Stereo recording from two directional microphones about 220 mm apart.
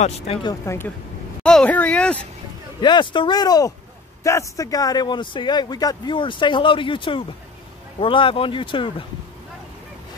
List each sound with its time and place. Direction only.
0.0 s speech: 25° left (ahead or behind); by 2.1 s 5° left (ahead or behind)
2.8 s speech: 20° left (ahead or behind)